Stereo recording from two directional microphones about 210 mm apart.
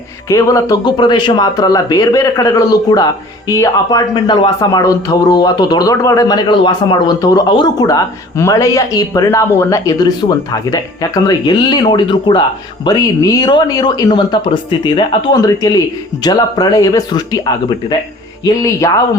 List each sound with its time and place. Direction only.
0.3 s speech: 15° left (ahead or behind)